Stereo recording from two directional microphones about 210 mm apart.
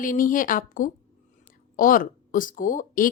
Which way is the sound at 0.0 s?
40° left (ahead or behind).